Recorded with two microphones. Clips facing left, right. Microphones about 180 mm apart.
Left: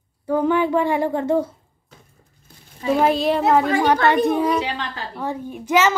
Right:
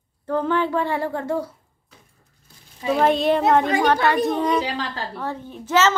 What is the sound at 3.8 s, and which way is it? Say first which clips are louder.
A woman's voice: left 2 dB; 15° left (ahead or behind).